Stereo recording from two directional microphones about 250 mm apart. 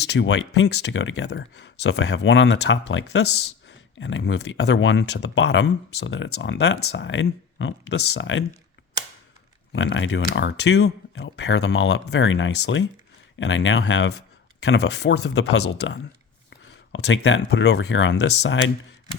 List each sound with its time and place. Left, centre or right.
0.1 s speech: left
9.7 s speech: left
14.6 s speech: left